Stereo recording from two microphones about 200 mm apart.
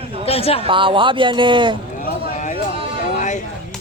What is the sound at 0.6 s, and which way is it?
Speech, 25° right (ahead or behind).